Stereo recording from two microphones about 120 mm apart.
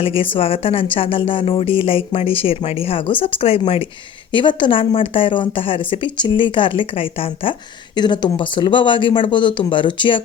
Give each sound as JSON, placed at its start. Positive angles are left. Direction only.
{"t": 0.0, "sound": "speech", "side_deg": 50}
{"t": 7.9, "sound": "speech", "side_deg": 40}